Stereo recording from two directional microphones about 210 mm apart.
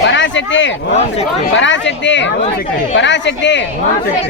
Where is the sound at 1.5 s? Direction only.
60° left (ahead or behind).